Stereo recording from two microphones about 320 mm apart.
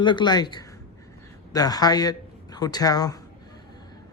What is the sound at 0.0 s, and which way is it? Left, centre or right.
Speech, centre.